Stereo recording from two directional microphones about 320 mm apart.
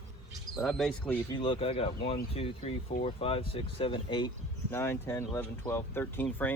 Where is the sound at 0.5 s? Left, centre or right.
Centre.